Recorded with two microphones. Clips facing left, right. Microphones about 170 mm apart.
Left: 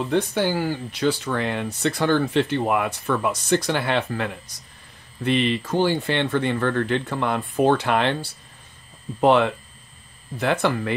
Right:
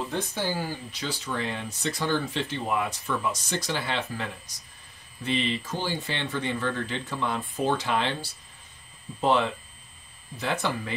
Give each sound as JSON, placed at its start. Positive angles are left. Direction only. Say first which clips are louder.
{"t": 0.1, "sound": "speech", "louder": "left 8 dB", "side_deg": 65}